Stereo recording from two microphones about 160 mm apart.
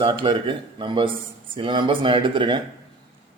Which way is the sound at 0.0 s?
30° right (ahead or behind).